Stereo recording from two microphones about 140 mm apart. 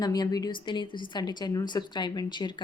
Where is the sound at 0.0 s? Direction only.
30° left (ahead or behind).